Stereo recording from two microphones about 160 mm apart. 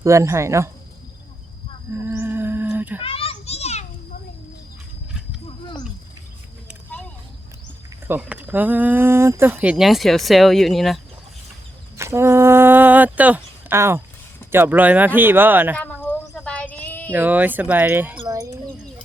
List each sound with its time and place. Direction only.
0.0 s speech: 20° right (ahead or behind)
1.9 s music: 15° right (ahead or behind)
3.0 s children playing: 35° left (ahead or behind)
5.5 s a sound: 30° left (ahead or behind)
8.0 s speech: 10° right (ahead or behind)
11.9 s speech: 15° right (ahead or behind)
15.7 s a sound: 10° left (ahead or behind)
17.1 s speech: 10° right (ahead or behind)